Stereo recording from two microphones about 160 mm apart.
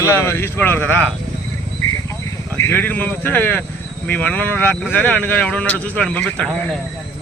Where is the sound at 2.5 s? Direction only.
15° left (ahead or behind).